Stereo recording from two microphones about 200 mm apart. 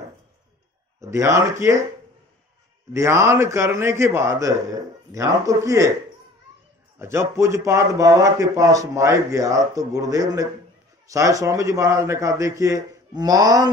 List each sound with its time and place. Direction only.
1.0 s a man's voice: 15° right (ahead or behind)
2.9 s a man's voice: 15° right (ahead or behind)
7.0 s a man's voice: 15° right (ahead or behind)